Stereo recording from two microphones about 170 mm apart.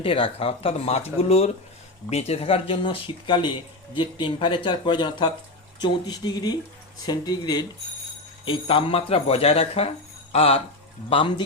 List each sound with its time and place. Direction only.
0.0 s speech: 30° left (ahead or behind)